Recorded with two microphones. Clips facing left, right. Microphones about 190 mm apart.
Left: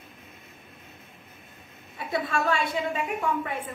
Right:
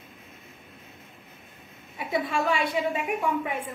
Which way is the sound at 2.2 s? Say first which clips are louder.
Left 1 dB; 15° right (ahead or behind).